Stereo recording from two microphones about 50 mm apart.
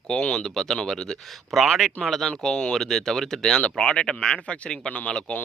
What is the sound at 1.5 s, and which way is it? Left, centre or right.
Speech, centre.